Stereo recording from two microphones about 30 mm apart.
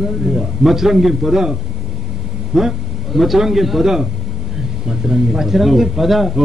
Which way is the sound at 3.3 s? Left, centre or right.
Centre.